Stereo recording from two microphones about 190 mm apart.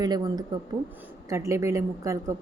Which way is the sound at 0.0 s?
20° right (ahead or behind).